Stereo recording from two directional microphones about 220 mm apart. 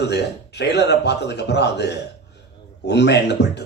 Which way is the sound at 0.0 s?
50° left (ahead or behind).